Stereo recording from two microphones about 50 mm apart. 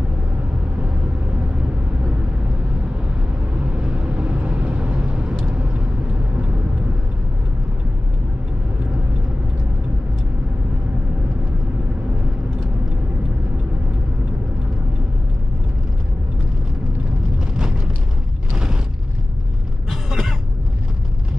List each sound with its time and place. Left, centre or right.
3.8 s vehicle: right
19.9 s cough: centre